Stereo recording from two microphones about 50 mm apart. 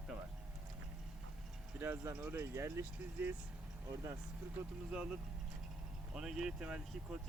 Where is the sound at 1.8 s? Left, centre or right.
Right.